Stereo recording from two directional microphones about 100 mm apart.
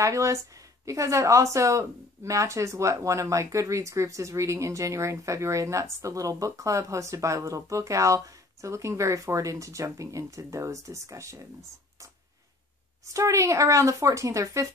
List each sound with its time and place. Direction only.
0.0 s speech: 30° right (ahead or behind)
13.0 s speech: 30° right (ahead or behind)